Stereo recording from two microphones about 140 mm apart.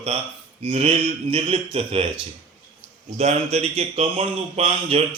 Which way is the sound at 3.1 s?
50° right (ahead or behind).